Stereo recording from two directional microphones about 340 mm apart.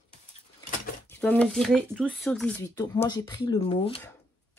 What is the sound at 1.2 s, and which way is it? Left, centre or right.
Speech, centre.